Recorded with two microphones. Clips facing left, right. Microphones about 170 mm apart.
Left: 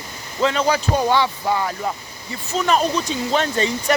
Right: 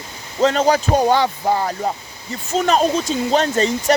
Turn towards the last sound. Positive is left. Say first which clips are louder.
# right 3 dB
turn(degrees=-35)  # may be behind; listen again after turning